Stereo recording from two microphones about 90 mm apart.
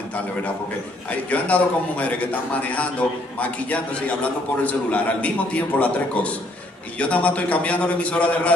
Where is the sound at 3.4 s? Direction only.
15° left (ahead or behind).